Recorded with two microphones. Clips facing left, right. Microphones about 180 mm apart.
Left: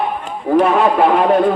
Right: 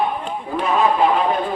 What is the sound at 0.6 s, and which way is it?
Speech, 60° left (ahead or behind).